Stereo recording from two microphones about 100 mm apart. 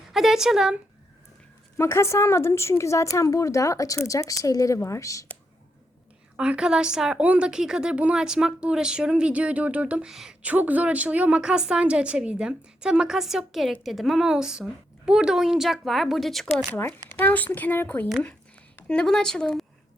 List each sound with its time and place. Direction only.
0.1 s speech: 5° right (ahead or behind)
1.8 s a woman's voice: 25° left (ahead or behind)
6.3 s a woman's voice: 10° right (ahead or behind)
17.1 s speech: 15° left (ahead or behind)